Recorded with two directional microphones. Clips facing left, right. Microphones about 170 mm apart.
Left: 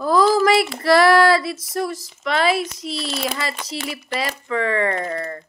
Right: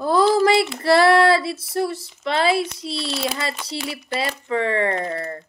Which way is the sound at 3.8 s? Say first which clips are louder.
Even; 25° right (ahead or behind).